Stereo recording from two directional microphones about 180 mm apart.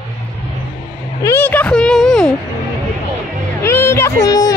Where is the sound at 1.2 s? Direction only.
15° left (ahead or behind).